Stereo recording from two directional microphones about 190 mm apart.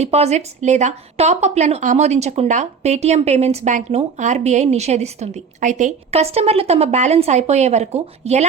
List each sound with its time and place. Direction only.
0.0 s a woman's voice: 35° right (ahead or behind)